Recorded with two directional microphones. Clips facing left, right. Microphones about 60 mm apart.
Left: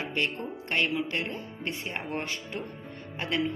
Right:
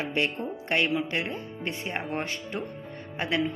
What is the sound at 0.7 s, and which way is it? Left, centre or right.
Speech, centre.